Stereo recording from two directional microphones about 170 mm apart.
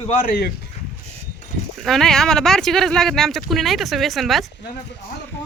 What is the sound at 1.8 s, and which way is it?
Speech, centre (ahead or behind).